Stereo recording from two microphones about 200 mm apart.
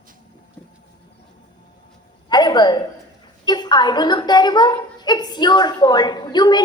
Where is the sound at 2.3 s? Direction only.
20° left (ahead or behind).